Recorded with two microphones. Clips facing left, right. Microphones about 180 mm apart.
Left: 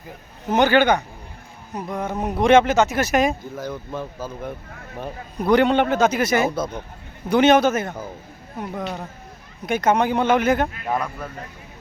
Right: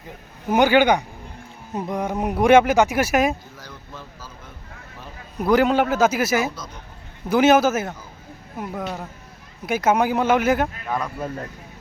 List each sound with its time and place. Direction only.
0.5 s speech: 10° right (ahead or behind)
3.6 s speech: 55° left (ahead or behind)
5.4 s a man's voice: centre (ahead or behind)
6.6 s speech: 55° left (ahead or behind)
7.3 s a man's voice: 5° right (ahead or behind)